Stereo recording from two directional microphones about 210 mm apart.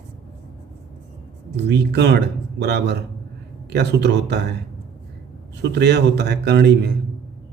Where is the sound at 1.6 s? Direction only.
55° right (ahead or behind).